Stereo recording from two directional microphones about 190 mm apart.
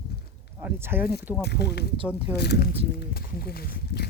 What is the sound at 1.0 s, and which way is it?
Speech, 55° left (ahead or behind).